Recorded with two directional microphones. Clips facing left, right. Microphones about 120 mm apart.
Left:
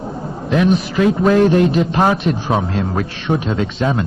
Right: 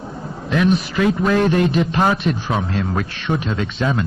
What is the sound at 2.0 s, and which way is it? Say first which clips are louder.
Speech: left 2 dB; 30° left (ahead or behind).